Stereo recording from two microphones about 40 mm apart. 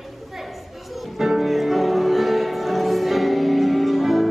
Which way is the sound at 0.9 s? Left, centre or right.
Centre.